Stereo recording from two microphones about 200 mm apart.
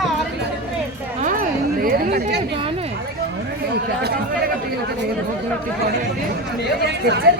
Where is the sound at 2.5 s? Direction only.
25° right (ahead or behind).